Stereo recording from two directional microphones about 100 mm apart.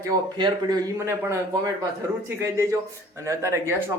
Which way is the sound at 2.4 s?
25° right (ahead or behind).